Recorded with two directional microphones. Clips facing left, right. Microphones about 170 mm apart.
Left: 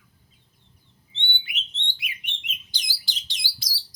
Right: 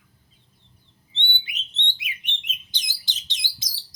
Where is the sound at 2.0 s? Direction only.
20° right (ahead or behind).